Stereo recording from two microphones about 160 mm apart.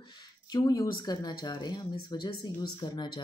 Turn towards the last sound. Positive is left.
turn(degrees=25)  # may be behind; listen again after turning